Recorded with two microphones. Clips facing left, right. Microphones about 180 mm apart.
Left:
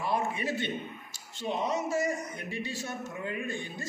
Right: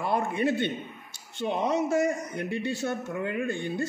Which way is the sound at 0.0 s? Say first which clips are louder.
Right 5 dB; 60° right (ahead or behind).